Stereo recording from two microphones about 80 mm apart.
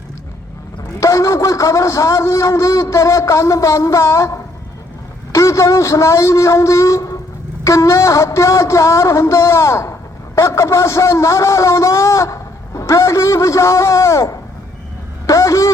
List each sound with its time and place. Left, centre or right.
0.9 s a man's voice: left